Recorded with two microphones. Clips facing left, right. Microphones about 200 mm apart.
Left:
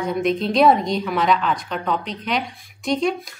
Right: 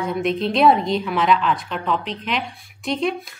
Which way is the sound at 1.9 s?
40° left (ahead or behind).